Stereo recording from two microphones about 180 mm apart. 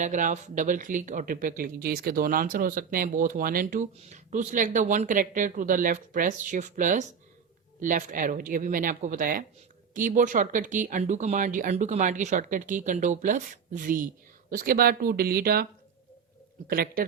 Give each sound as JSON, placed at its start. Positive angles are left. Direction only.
{"t": 0.0, "sound": "speech", "side_deg": -45}
{"t": 16.6, "sound": "speech", "side_deg": -55}